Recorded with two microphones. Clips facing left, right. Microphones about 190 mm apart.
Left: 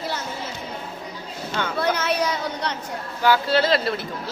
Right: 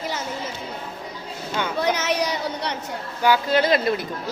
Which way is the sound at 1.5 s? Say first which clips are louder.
Right 1 dB; 15° right (ahead or behind).